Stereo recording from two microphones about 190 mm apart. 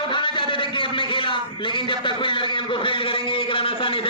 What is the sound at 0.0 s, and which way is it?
A man's voice, 25° left (ahead or behind).